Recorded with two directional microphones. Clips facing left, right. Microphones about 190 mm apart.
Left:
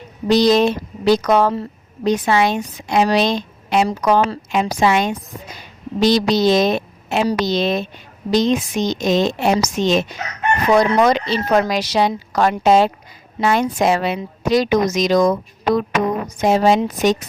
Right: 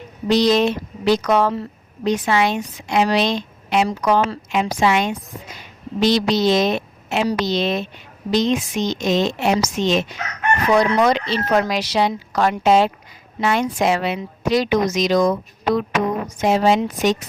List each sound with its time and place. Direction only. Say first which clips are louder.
0.3 s a woman's voice: left 2 dB; 40° left (ahead or behind)